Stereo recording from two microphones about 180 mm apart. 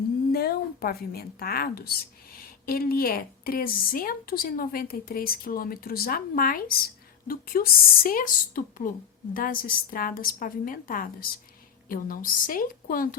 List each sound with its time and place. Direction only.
0.3 s a woman's voice: 60° left (ahead or behind)